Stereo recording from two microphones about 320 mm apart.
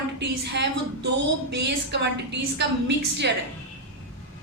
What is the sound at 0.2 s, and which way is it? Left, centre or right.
A woman's voice, right.